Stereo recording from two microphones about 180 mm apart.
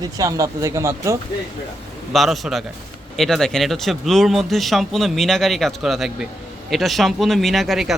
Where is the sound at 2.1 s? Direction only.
Centre (ahead or behind).